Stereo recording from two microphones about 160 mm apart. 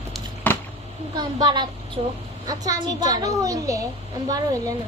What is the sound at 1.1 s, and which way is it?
Speech, 25° right (ahead or behind).